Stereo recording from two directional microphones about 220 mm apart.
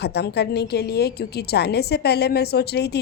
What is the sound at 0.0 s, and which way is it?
A woman's voice, 50° left (ahead or behind).